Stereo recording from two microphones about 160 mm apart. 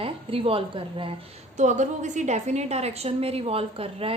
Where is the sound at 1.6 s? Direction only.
50° right (ahead or behind).